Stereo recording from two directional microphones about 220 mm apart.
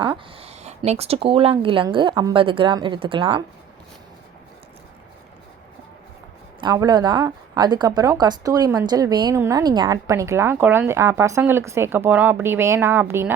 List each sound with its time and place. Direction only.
0.0 s speech: 25° right (ahead or behind)
6.6 s speech: 20° right (ahead or behind)